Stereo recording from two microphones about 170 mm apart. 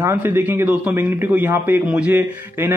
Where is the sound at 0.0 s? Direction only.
10° right (ahead or behind).